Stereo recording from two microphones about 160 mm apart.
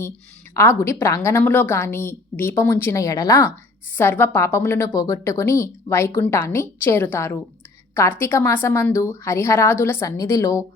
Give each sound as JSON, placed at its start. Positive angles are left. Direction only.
{"t": 0.5, "sound": "a woman's voice", "side_deg": 15}